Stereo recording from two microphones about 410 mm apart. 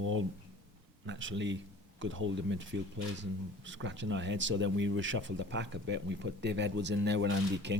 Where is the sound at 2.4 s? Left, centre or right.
Right.